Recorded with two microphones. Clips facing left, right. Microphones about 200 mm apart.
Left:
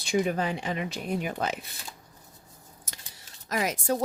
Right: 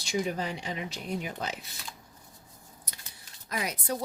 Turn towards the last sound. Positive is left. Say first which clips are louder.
# left 5 dB
turn(degrees=90)